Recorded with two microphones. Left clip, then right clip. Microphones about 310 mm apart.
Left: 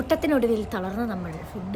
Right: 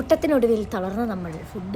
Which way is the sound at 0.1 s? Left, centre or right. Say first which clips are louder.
Right 4 dB; centre.